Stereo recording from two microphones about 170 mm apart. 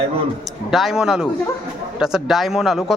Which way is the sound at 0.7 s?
Centre (ahead or behind).